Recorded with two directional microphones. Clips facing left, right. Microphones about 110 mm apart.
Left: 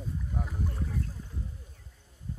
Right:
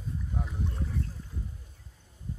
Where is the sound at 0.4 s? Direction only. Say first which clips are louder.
Left 1 dB; 5° left (ahead or behind).